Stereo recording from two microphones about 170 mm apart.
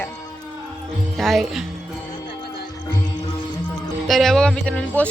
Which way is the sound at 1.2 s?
Centre (ahead or behind).